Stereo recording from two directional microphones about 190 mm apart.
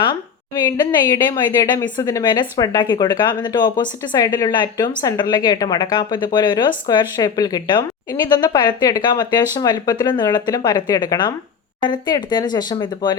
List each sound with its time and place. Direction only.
0.0 s a woman's voice: 25° left (ahead or behind)